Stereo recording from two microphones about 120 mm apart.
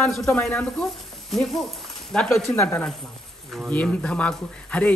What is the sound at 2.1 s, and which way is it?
A woman's voice, 5° left (ahead or behind).